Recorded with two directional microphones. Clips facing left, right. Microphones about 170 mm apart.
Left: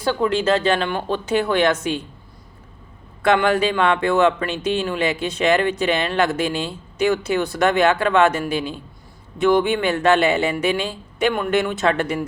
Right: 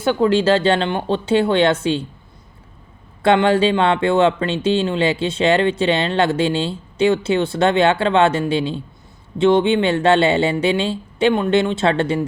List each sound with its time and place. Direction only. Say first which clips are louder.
0.0 s speech: right 4 dB; 25° right (ahead or behind)
3.2 s speech: right 3 dB; 30° right (ahead or behind)